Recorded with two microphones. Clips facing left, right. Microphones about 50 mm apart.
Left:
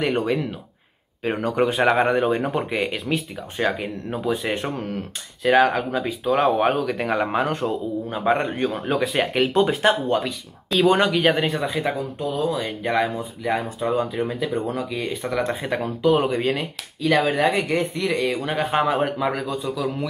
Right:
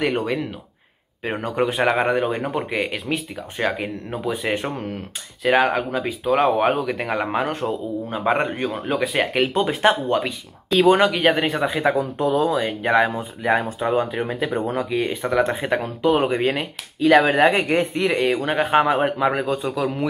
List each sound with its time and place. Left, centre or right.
0.0 s a man's voice: centre
11.5 s a man's voice: right